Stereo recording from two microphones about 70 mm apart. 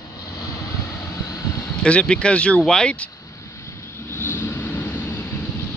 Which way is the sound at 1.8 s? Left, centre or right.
Centre.